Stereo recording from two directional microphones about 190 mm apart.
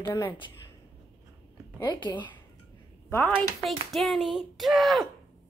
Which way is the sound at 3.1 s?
5° left (ahead or behind).